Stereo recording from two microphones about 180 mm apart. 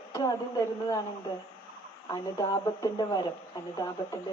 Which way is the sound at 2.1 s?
20° left (ahead or behind).